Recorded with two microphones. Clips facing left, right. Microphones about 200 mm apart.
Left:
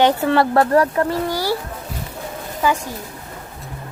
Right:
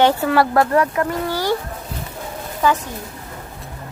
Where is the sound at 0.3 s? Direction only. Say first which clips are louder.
Left 1 dB; 30° left (ahead or behind).